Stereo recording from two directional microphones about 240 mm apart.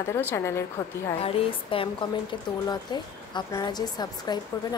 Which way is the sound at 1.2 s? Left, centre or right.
Left.